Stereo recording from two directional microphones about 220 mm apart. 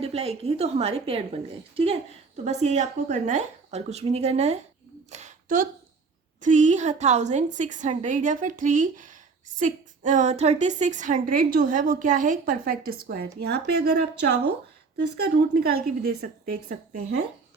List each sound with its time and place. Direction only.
0.0 s a woman's voice: 30° right (ahead or behind)
5.1 s a sound: 35° right (ahead or behind)
6.4 s a woman's voice: 35° right (ahead or behind)